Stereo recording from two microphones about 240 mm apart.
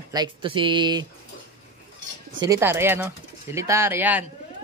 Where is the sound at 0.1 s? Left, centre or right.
Centre.